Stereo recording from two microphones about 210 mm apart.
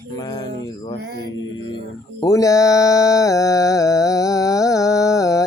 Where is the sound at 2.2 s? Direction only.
15° left (ahead or behind).